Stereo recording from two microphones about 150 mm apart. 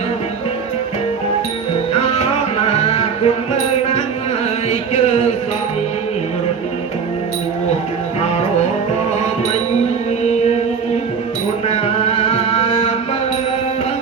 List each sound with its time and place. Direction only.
1.9 s music: 45° left (ahead or behind)
4.7 s a sound: 45° left (ahead or behind)
11.7 s chant: 45° left (ahead or behind)